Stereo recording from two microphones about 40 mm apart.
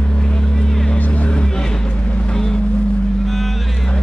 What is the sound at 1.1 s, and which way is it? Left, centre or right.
Music, left.